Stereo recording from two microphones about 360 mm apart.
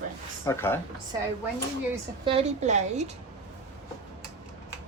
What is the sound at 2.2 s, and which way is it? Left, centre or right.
Speech, centre.